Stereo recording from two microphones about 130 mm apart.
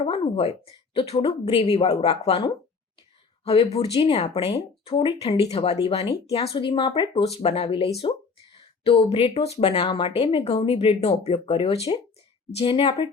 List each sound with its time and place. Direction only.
0.0 s a woman's voice: 50° left (ahead or behind)